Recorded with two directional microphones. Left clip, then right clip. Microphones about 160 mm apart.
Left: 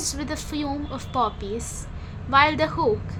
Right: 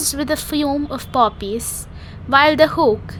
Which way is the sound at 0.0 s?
45° right (ahead or behind).